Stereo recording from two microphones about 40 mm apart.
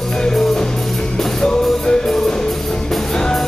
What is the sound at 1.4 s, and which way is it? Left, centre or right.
Music, centre.